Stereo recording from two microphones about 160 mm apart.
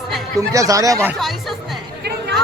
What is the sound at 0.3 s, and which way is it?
Speech, 20° right (ahead or behind).